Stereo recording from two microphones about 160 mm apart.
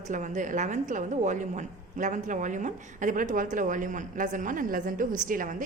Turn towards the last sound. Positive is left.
turn(degrees=-55)  # may be behind; listen again after turning